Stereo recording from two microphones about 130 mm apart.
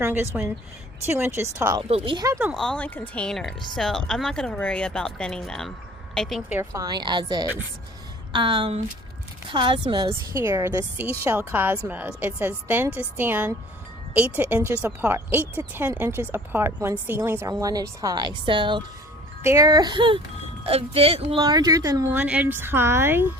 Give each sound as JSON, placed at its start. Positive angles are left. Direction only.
{"t": 0.0, "sound": "a woman's voice", "side_deg": -15}
{"t": 1.9, "sound": "a woman's voice", "side_deg": -40}
{"t": 2.6, "sound": "speech", "side_deg": 10}
{"t": 6.5, "sound": "speech", "side_deg": -20}
{"t": 6.8, "sound": "a woman's voice", "side_deg": -35}
{"t": 10.3, "sound": "a woman's voice", "side_deg": -20}
{"t": 19.4, "sound": "a woman's voice", "side_deg": -25}
{"t": 21.4, "sound": "speech", "side_deg": -30}
{"t": 22.1, "sound": "a woman's voice", "side_deg": -10}